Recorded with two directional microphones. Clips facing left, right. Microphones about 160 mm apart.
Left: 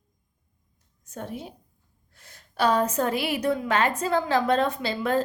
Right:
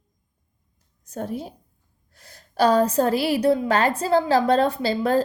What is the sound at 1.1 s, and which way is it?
A woman's voice, 35° right (ahead or behind).